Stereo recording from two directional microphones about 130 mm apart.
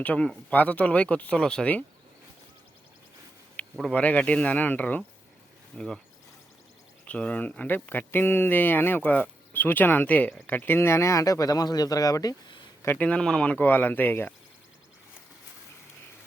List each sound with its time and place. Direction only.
0.0 s speech: 10° left (ahead or behind)
3.8 s speech: 5° left (ahead or behind)
7.0 s speech: 10° left (ahead or behind); by 12.6 s 35° left (ahead or behind)
12.8 s speech: 15° left (ahead or behind)